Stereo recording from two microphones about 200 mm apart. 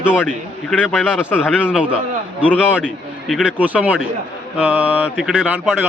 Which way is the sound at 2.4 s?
5° left (ahead or behind).